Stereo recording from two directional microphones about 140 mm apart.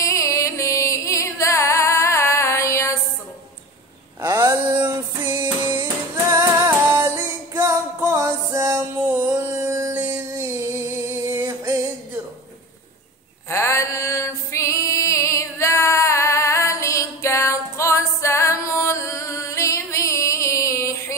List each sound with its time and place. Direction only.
0.0 s music: 20° left (ahead or behind)
4.2 s a sound: 20° right (ahead or behind)
6.9 s music: 15° right (ahead or behind)
9.3 s a sound: 20° right (ahead or behind)
11.1 s music: 15° right (ahead or behind)
13.5 s music: 20° left (ahead or behind)